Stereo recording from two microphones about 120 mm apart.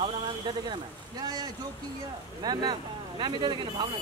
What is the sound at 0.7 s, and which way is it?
Speech, 35° right (ahead or behind).